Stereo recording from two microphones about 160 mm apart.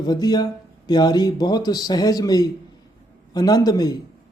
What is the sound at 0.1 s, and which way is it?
Speech, 25° left (ahead or behind).